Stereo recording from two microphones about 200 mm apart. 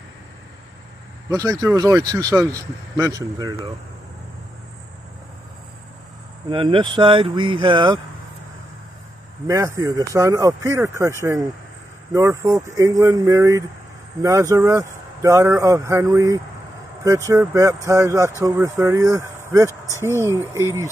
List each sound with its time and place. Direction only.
1.3 s speech: 15° right (ahead or behind)
6.5 s speech: 25° right (ahead or behind)
9.5 s speech: 15° right (ahead or behind)